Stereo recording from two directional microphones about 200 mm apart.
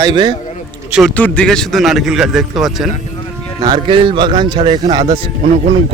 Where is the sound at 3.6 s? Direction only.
25° right (ahead or behind).